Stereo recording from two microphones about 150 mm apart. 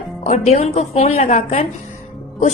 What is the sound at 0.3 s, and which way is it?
A woman's voice, 45° left (ahead or behind).